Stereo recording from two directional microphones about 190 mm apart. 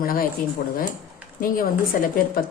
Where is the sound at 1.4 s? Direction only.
50° left (ahead or behind).